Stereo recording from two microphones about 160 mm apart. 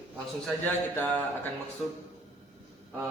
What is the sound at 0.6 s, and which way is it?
Speech, 10° left (ahead or behind).